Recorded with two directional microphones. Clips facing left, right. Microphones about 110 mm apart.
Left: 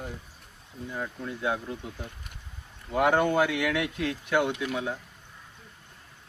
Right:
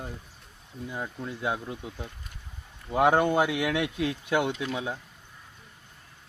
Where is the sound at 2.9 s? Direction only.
20° right (ahead or behind).